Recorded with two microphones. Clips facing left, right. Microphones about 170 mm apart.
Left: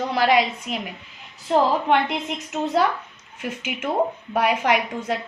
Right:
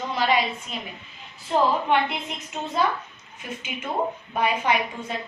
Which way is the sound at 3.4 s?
80° left.